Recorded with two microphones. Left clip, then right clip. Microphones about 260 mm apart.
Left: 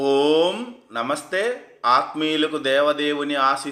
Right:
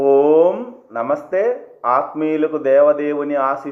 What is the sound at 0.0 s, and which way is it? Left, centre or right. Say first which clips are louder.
A man's voice: right 6 dB; left.